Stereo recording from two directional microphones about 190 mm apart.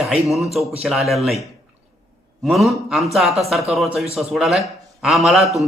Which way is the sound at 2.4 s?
Centre (ahead or behind).